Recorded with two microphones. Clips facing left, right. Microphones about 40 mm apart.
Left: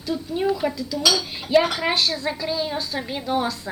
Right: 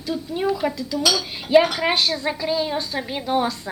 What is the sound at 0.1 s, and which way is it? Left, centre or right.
Speech, centre.